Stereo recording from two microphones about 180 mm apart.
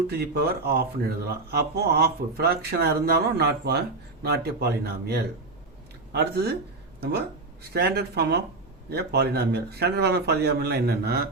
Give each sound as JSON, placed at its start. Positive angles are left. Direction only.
{"t": 0.1, "sound": "speech", "side_deg": -60}